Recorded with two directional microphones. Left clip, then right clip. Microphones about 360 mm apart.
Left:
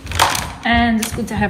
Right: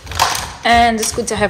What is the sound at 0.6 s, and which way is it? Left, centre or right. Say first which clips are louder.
Speech: right 6 dB; centre.